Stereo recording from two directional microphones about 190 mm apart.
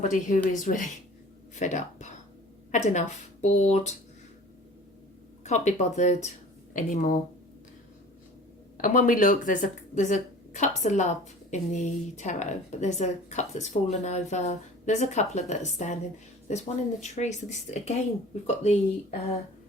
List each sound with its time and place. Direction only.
0.0 s speech: 40° left (ahead or behind)
5.4 s speech: 35° left (ahead or behind)
8.8 s speech: 45° left (ahead or behind)